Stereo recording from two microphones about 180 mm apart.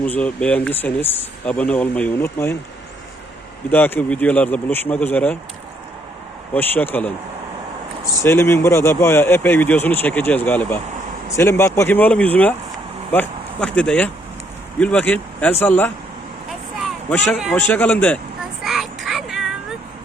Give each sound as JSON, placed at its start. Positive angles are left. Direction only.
{"t": 0.0, "sound": "speech", "side_deg": 10}
{"t": 3.7, "sound": "speech", "side_deg": 10}
{"t": 6.5, "sound": "speech", "side_deg": 10}
{"t": 8.2, "sound": "speech", "side_deg": 15}
{"t": 17.1, "sound": "speech", "side_deg": 10}
{"t": 18.6, "sound": "child singing", "side_deg": 0}